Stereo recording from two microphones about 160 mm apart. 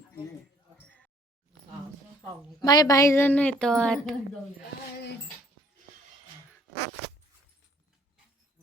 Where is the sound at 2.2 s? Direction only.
25° left (ahead or behind); by 4.2 s 5° left (ahead or behind).